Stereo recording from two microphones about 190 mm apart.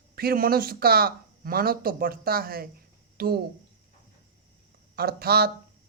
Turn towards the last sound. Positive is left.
turn(degrees=-55)  # may be behind; listen again after turning